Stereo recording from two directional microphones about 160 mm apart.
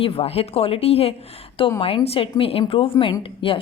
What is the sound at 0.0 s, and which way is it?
A woman's voice, 35° left (ahead or behind).